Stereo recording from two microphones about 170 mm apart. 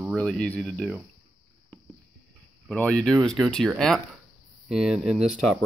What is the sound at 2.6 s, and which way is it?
Speech, 5° left (ahead or behind).